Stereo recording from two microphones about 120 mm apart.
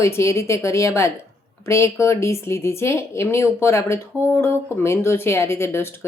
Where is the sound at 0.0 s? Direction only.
25° left (ahead or behind).